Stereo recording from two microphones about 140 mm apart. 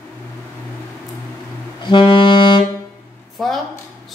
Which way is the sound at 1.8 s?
35° left (ahead or behind).